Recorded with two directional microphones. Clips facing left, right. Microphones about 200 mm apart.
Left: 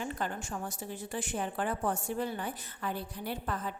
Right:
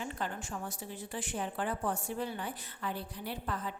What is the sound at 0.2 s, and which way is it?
A woman's voice, 45° left (ahead or behind).